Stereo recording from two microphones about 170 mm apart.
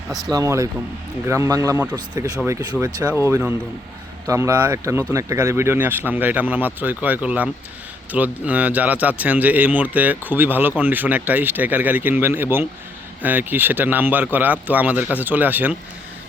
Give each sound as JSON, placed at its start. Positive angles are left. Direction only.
{"t": 0.3, "sound": "speech", "side_deg": -20}
{"t": 3.0, "sound": "speech", "side_deg": -10}